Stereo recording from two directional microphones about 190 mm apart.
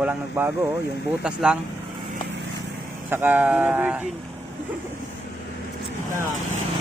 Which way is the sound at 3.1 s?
10° right (ahead or behind).